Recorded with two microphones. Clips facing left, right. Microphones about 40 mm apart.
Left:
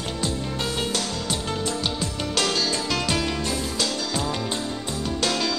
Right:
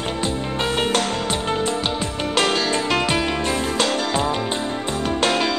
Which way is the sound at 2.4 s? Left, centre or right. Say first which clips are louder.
Right 5 dB; right.